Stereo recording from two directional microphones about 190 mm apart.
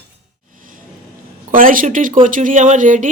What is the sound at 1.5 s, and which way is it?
A woman's voice, 45° right (ahead or behind).